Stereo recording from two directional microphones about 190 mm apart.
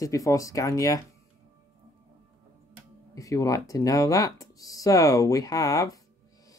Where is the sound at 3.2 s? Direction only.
15° left (ahead or behind).